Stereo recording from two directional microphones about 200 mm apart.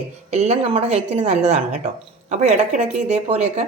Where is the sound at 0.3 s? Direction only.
35° right (ahead or behind).